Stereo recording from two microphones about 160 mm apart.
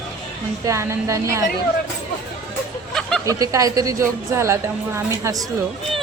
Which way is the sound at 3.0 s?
5° left (ahead or behind).